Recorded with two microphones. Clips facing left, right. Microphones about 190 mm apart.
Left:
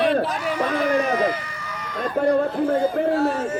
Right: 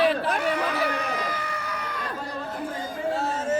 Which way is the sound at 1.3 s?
60° right (ahead or behind).